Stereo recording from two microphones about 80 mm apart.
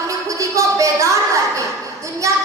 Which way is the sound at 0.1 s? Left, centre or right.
Right.